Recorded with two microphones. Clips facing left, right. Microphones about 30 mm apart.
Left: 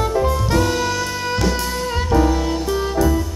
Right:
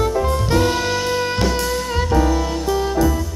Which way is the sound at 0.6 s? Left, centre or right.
Right.